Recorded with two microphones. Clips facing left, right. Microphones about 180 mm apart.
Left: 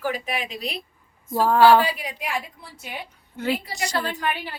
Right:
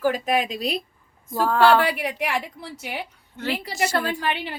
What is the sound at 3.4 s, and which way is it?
Speech, 10° left (ahead or behind).